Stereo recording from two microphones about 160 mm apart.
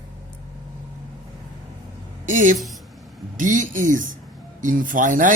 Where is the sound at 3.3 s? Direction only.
55° right (ahead or behind).